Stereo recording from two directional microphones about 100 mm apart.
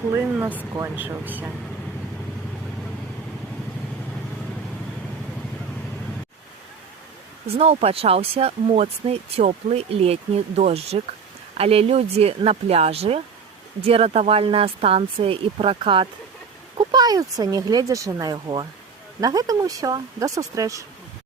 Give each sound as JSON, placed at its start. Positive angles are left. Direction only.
{"t": 0.1, "sound": "speech", "side_deg": -20}
{"t": 7.4, "sound": "speech", "side_deg": -85}
{"t": 13.8, "sound": "speech", "side_deg": -75}
{"t": 16.9, "sound": "speech", "side_deg": -40}